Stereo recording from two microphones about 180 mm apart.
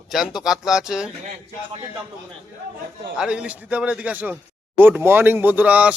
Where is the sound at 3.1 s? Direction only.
5° right (ahead or behind).